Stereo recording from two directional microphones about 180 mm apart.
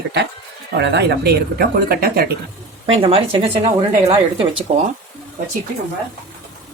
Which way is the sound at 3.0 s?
30° right (ahead or behind).